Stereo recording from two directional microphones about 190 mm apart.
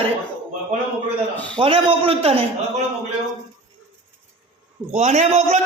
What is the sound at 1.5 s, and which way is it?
Speech, 30° right (ahead or behind).